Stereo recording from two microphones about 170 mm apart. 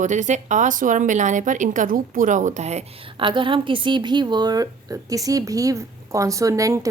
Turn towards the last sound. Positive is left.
turn(degrees=-20)  # may be behind; listen again after turning